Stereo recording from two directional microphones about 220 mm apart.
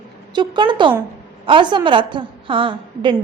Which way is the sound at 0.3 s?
20° right (ahead or behind).